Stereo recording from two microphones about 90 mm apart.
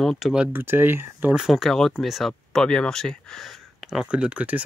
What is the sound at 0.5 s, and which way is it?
Speech, 25° right (ahead or behind).